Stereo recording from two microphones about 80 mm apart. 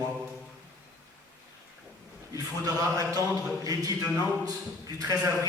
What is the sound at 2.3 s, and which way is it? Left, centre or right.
A man's voice, right.